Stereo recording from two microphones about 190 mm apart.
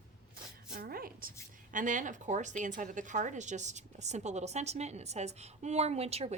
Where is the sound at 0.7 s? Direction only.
50° right (ahead or behind).